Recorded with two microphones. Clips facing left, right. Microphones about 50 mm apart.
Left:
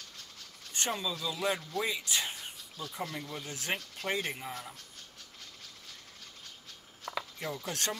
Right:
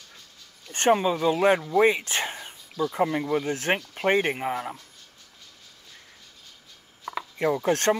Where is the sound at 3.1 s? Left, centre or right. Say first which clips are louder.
Right 15 dB; right.